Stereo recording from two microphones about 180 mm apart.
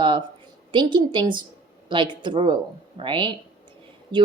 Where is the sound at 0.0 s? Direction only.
25° right (ahead or behind).